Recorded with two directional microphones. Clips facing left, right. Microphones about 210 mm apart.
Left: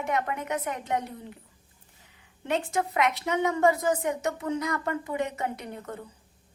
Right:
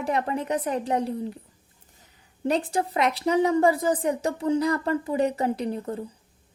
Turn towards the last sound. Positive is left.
turn(degrees=-30)  # may be behind; listen again after turning